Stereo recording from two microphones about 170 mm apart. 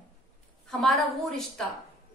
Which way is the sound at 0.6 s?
Centre (ahead or behind).